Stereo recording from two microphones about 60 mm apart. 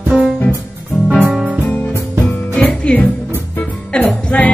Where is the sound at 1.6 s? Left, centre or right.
Left.